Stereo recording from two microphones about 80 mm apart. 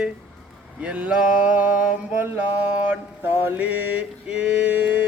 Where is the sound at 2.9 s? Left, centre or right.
Right.